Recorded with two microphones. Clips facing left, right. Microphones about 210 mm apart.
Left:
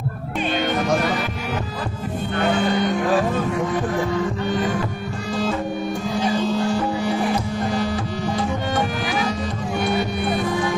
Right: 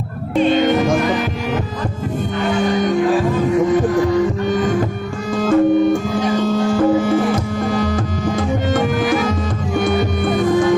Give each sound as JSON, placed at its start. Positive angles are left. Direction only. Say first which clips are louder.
{"t": 5.3, "sound": "music", "louder": "right 6 dB", "side_deg": -50}
{"t": 6.7, "sound": "music", "louder": "right 8 dB", "side_deg": -45}